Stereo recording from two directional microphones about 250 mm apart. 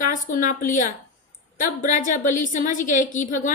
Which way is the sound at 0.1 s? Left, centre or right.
Left.